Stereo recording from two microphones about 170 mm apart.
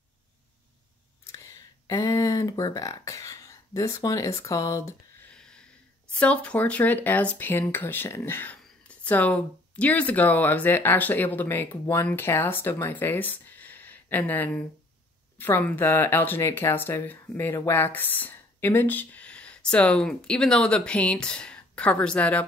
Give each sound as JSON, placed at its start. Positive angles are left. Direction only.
{"t": 1.2, "sound": "a sound", "side_deg": 20}
{"t": 5.3, "sound": "snort", "side_deg": 5}
{"t": 6.1, "sound": "speech", "side_deg": 5}